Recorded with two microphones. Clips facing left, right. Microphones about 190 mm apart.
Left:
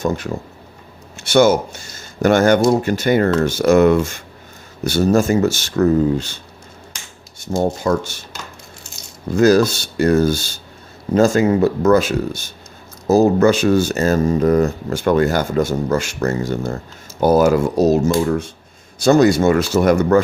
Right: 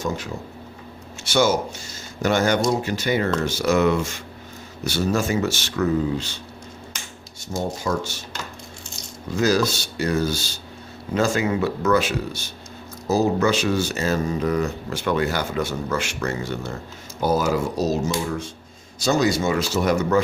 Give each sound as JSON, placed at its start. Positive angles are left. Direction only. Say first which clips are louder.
{"t": 0.0, "sound": "speech", "louder": "left 6 dB", "side_deg": 55}
{"t": 7.6, "sound": "speech", "louder": "left 7 dB", "side_deg": 55}
{"t": 9.3, "sound": "speech", "louder": "left 7 dB", "side_deg": 50}
{"t": 17.2, "sound": "speech", "louder": "left 8 dB", "side_deg": 55}